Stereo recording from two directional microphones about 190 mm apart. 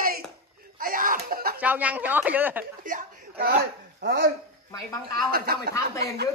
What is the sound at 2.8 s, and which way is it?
Chuckle, 45° right (ahead or behind).